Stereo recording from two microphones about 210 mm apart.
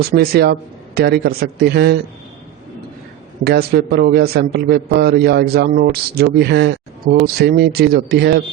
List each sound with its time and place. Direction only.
0.0 s a man's voice: 45° right (ahead or behind)
3.4 s a man's voice: 50° right (ahead or behind)